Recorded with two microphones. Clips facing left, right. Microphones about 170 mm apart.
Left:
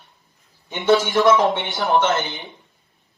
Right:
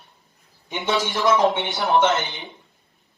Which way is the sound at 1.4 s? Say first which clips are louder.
Right 1 dB; 20° right (ahead or behind).